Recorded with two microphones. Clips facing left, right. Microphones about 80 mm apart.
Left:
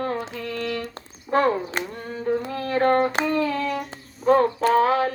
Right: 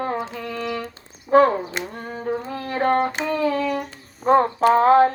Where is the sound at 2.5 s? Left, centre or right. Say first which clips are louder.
Even; centre.